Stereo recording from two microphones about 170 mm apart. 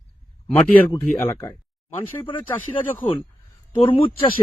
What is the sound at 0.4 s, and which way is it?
Speech, 10° left (ahead or behind).